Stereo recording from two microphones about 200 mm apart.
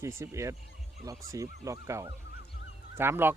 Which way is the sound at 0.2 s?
15° right (ahead or behind).